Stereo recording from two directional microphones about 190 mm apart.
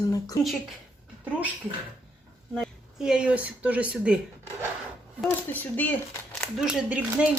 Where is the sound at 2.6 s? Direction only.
5° right (ahead or behind).